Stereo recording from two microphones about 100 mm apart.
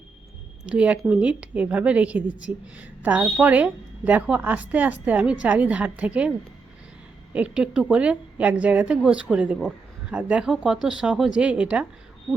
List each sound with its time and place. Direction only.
0.6 s a woman's voice: 10° right (ahead or behind)
7.3 s a woman's voice: 10° right (ahead or behind)